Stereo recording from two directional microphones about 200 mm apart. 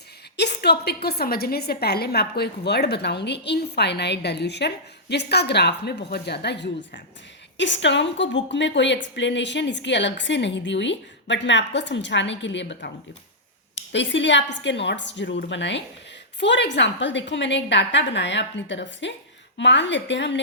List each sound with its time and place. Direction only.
0.3 s a woman's voice: 55° left (ahead or behind)